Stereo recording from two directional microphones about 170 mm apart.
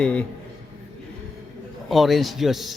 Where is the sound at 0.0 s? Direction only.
5° left (ahead or behind).